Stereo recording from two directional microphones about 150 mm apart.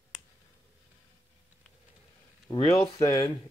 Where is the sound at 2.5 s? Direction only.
35° left (ahead or behind).